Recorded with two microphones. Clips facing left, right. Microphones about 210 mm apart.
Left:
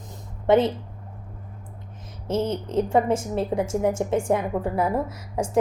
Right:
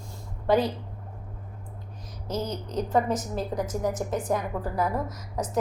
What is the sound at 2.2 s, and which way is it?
A woman's voice, 25° left (ahead or behind).